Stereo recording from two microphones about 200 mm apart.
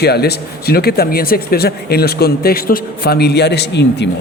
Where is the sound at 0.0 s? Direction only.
55° left (ahead or behind).